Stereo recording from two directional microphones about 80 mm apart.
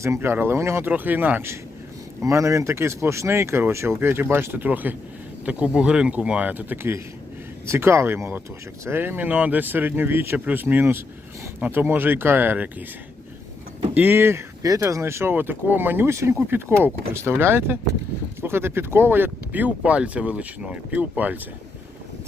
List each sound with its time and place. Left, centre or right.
0.2 s speech: right
0.9 s speech: right
2.2 s speech: right
7.7 s speech: right
13.9 s speech: right
14.6 s speech: right